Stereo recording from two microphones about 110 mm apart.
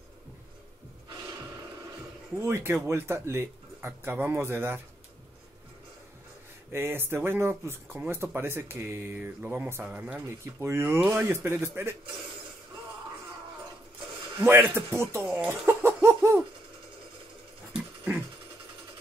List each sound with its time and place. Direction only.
2.3 s speech: 25° right (ahead or behind)
6.7 s speech: 20° right (ahead or behind)
10.6 s speech: 25° right (ahead or behind)
14.4 s speech: 20° right (ahead or behind)
15.2 s speech: 10° right (ahead or behind)
15.6 s a sound: 20° right (ahead or behind)